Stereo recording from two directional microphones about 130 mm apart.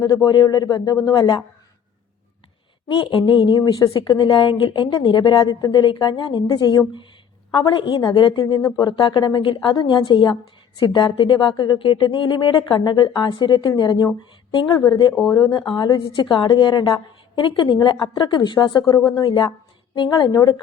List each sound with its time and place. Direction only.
0.0 s speech: 30° left (ahead or behind)
3.1 s speech: 40° left (ahead or behind)
19.2 s speech: 40° left (ahead or behind)